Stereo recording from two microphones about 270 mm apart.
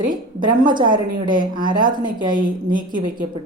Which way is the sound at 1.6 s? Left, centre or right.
Right.